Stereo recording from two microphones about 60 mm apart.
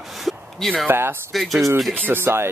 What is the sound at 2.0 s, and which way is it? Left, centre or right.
Speech, right.